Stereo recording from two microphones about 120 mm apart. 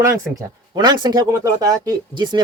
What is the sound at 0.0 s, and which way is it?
Speech, 25° right (ahead or behind).